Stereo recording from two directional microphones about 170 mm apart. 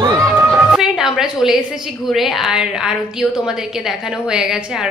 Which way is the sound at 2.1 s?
Centre (ahead or behind).